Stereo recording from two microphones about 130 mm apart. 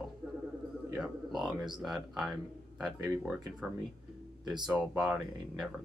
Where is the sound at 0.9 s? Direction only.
5° right (ahead or behind).